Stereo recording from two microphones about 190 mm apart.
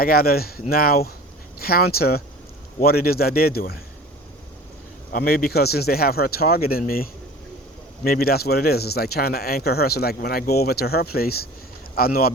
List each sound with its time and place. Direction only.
0.0 s speech: 50° left (ahead or behind)
5.1 s speech: 55° left (ahead or behind)